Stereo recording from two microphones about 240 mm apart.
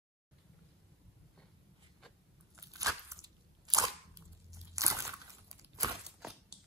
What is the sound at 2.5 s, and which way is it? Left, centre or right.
Crunch, centre.